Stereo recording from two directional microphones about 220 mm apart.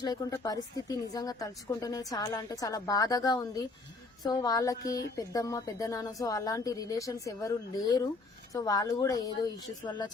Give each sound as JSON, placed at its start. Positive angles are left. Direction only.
{"t": 0.0, "sound": "a woman's voice", "side_deg": 15}